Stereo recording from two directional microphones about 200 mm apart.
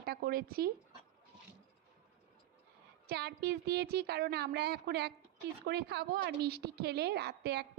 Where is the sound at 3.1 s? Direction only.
50° right (ahead or behind).